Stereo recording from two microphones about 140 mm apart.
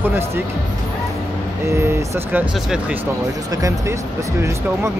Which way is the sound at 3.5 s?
25° right (ahead or behind).